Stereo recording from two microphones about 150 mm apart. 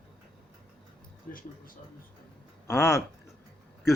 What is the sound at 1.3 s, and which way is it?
Speech, 70° left (ahead or behind).